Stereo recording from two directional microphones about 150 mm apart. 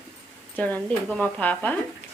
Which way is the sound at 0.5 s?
10° left (ahead or behind).